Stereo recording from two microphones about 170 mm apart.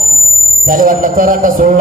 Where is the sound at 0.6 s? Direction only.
55° right (ahead or behind).